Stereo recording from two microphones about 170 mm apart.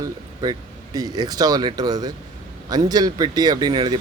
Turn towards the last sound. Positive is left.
turn(degrees=-25)  # may be behind; listen again after turning